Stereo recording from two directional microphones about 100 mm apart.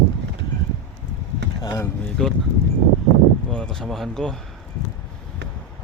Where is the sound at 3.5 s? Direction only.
5° left (ahead or behind).